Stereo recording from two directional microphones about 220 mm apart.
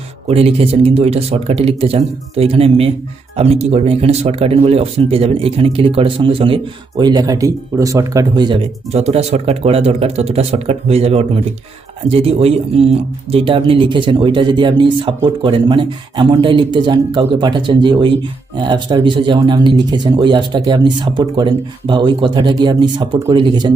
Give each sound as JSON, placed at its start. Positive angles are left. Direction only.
{"t": 0.3, "sound": "speech", "side_deg": -25}